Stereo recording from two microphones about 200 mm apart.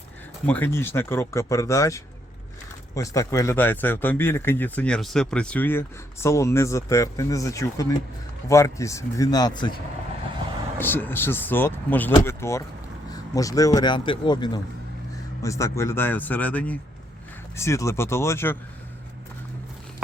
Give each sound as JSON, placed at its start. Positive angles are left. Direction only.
{"t": 0.4, "sound": "speech", "side_deg": 10}
{"t": 10.8, "sound": "speech", "side_deg": 10}